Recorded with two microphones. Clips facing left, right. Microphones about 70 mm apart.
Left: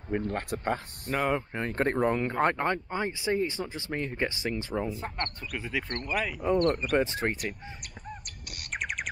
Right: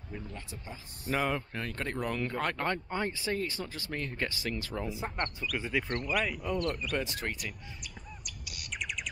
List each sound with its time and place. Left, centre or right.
0.1 s speech: left
1.0 s speech: centre
1.3 s speech: left
4.8 s speech: centre
6.4 s speech: left
7.3 s bird: left